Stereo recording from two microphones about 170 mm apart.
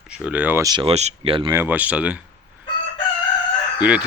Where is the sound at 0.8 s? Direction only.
40° right (ahead or behind).